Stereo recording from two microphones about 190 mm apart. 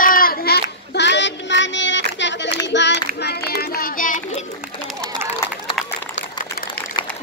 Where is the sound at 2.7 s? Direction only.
65° left (ahead or behind); by 4.2 s 45° left (ahead or behind).